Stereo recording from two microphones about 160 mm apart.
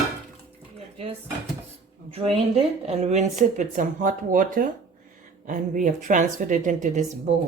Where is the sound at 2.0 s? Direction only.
40° right (ahead or behind).